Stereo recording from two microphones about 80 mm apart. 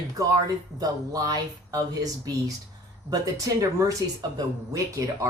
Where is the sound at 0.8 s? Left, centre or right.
Right.